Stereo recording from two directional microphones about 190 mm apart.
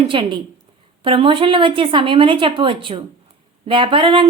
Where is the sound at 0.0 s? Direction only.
25° right (ahead or behind).